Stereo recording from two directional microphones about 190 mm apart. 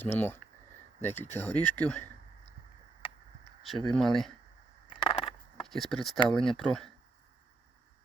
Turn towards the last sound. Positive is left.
turn(degrees=0)  # may be behind; listen again after turning